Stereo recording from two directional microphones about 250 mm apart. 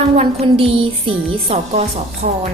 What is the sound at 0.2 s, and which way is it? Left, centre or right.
Speech, right.